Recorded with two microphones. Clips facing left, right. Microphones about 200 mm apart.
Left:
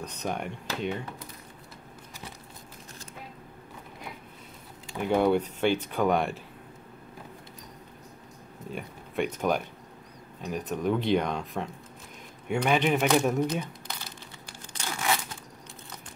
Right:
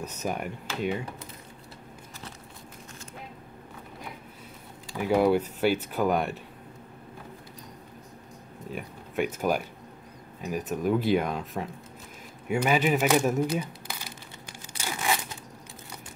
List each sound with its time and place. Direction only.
0.0 s speech: 5° right (ahead or behind)
4.9 s speech: 5° right (ahead or behind)
8.7 s speech: 5° right (ahead or behind)
14.7 s tearing: 10° right (ahead or behind)